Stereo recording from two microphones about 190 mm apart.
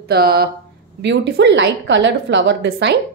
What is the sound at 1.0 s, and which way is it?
A woman's voice, 65° right (ahead or behind).